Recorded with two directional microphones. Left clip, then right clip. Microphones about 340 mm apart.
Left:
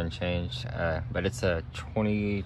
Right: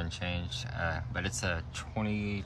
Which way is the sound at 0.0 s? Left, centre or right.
Centre.